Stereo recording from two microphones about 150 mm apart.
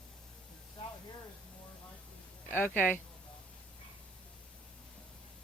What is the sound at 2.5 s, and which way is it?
Speech, 15° left (ahead or behind).